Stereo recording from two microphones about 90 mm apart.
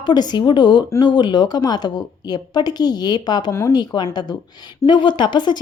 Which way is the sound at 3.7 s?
55° left (ahead or behind).